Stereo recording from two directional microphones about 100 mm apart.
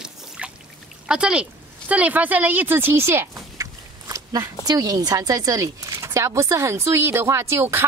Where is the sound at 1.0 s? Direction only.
10° right (ahead or behind).